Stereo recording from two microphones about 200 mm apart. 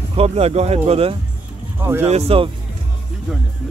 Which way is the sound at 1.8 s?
10° right (ahead or behind).